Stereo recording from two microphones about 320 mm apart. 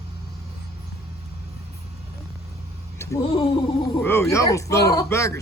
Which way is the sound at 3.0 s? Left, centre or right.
Centre.